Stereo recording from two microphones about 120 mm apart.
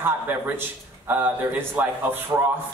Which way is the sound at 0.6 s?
15° right (ahead or behind).